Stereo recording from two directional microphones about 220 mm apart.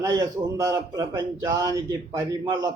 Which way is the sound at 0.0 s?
15° right (ahead or behind).